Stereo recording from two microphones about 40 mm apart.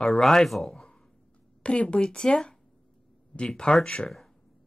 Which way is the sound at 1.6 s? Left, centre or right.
Left.